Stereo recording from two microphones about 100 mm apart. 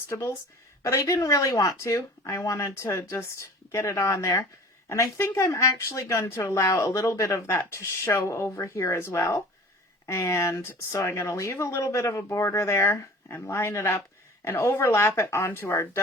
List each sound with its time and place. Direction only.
0.1 s speech: 30° left (ahead or behind)